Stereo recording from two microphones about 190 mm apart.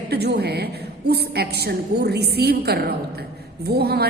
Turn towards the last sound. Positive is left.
turn(degrees=-55)  # may be behind; listen again after turning